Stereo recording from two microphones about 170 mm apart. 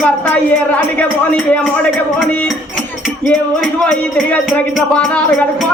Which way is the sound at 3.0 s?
5° right (ahead or behind).